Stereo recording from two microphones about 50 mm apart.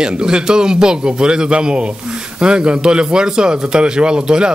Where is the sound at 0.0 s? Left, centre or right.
Centre.